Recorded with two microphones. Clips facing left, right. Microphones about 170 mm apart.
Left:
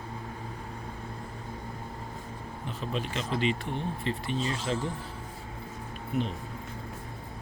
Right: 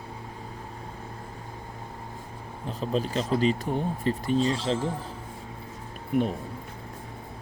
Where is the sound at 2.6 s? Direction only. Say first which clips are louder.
Right 6 dB; 35° right (ahead or behind).